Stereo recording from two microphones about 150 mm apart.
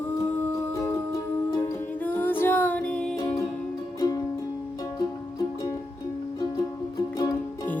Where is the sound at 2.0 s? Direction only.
15° left (ahead or behind).